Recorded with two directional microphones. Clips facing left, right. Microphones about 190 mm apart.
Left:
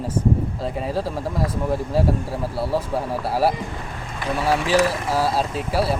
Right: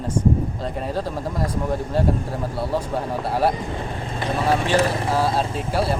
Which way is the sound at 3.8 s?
30° right (ahead or behind).